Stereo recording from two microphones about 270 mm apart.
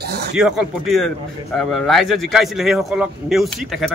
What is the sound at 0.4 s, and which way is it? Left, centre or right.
A man's voice, centre.